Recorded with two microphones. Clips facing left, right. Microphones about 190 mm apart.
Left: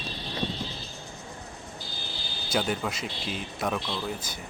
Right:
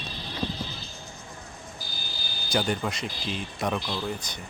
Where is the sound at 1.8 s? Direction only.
25° left (ahead or behind).